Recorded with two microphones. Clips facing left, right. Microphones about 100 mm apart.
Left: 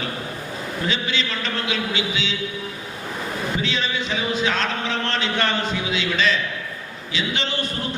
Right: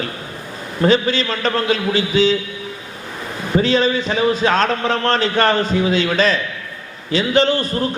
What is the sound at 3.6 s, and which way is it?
A man's voice, 40° right (ahead or behind).